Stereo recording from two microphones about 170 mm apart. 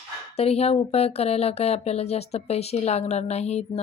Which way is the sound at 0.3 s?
35° left (ahead or behind).